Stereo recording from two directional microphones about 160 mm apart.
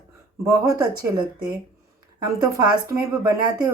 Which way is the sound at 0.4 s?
20° right (ahead or behind).